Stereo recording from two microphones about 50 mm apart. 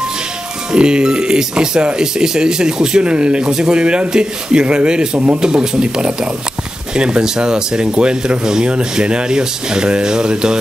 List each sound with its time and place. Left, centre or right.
0.7 s speech: centre